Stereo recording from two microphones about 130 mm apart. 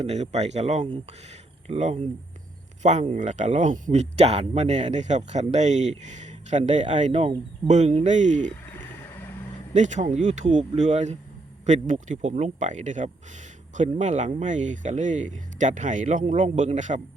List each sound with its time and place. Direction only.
0.0 s speech: 60° right (ahead or behind)
8.4 s a sound: 15° left (ahead or behind)
9.7 s speech: 70° right (ahead or behind)
16.2 s speech: 65° right (ahead or behind)